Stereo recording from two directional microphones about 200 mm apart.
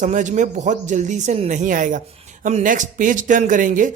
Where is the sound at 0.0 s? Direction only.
40° right (ahead or behind).